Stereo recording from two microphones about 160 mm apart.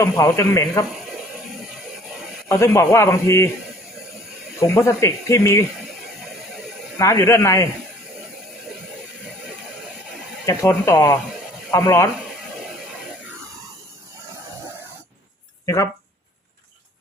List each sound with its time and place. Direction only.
0.0 s speech: 20° left (ahead or behind)
2.5 s a man's voice: 15° left (ahead or behind)
4.6 s speech: 20° left (ahead or behind)
7.0 s speech: 20° left (ahead or behind)
10.4 s speech: 20° left (ahead or behind)
15.6 s speech: 20° left (ahead or behind)